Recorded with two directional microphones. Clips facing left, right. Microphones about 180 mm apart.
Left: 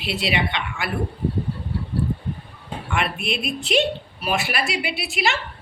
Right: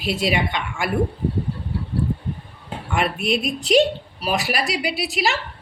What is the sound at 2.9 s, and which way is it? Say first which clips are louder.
A woman's voice: right 4 dB; 40° right (ahead or behind).